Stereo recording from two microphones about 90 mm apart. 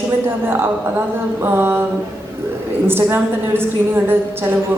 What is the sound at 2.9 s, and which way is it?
A woman's voice, 25° right (ahead or behind).